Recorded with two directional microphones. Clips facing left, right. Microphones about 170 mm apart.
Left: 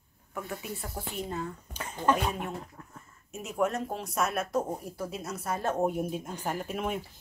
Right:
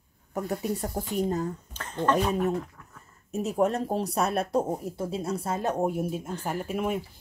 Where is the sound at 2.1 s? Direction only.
40° right (ahead or behind).